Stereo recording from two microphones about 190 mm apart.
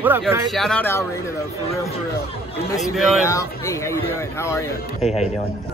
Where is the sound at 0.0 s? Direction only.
10° right (ahead or behind).